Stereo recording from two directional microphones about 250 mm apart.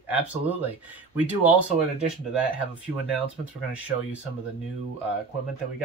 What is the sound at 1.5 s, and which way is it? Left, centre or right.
Speech, centre.